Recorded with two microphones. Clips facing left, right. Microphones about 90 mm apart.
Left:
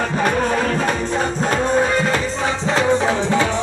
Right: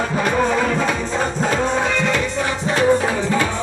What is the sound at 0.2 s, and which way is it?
Music, 50° left (ahead or behind).